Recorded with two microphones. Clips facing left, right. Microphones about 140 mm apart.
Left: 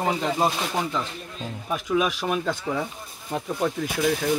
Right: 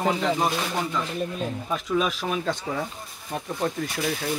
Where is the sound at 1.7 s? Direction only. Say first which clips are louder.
Left 3 dB; 5° left (ahead or behind).